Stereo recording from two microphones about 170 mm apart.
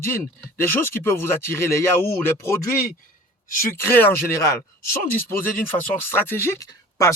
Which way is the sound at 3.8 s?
15° left (ahead or behind).